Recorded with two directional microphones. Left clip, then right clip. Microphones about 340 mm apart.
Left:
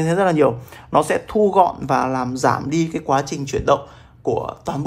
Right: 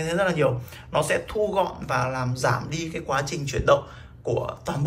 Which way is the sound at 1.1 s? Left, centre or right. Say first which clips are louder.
Left 7 dB; centre.